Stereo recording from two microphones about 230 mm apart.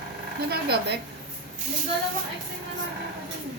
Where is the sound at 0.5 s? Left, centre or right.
Right.